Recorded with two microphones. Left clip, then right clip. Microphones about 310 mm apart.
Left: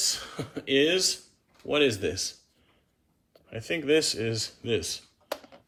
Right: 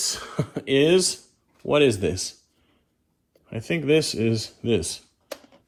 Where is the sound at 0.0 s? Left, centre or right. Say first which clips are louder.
Right 2 dB; centre.